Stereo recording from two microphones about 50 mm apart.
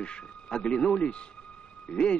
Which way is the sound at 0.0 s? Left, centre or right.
Left.